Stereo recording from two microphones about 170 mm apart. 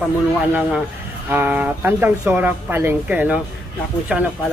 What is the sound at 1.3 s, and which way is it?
Speech, 10° right (ahead or behind).